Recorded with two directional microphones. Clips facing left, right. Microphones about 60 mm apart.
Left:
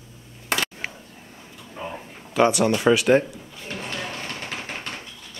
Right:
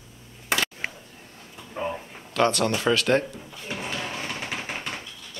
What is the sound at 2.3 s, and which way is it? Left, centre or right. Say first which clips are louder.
Speech: left 3 dB; centre.